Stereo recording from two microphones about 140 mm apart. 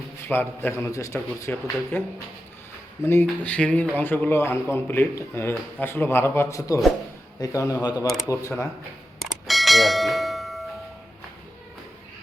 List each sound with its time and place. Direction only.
0.3 s a man's voice: 15° left (ahead or behind)
9.5 s bell: centre (ahead or behind)